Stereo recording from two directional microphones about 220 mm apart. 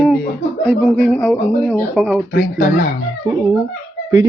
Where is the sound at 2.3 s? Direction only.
45° left (ahead or behind).